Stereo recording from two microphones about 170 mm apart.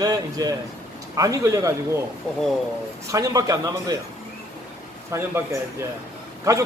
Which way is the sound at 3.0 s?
20° right (ahead or behind).